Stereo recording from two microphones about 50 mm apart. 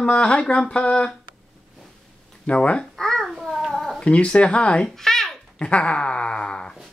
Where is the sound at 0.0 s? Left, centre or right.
Left.